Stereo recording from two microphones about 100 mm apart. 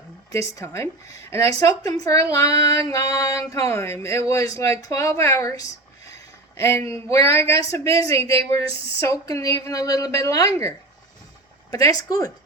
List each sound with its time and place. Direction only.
0.3 s speech: 30° left (ahead or behind)